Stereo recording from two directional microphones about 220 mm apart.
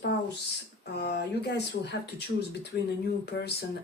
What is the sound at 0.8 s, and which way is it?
Speech, 50° left (ahead or behind).